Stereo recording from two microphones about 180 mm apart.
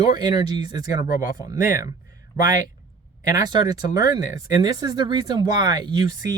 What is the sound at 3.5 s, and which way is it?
Speech, 20° right (ahead or behind).